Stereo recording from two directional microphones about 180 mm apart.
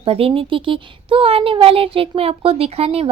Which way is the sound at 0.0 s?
30° right (ahead or behind).